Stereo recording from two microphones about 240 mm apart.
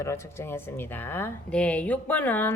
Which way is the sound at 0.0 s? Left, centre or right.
Centre.